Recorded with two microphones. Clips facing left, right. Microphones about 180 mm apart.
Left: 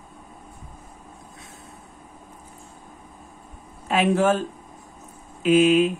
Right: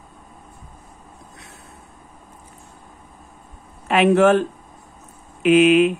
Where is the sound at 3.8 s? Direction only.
70° right (ahead or behind).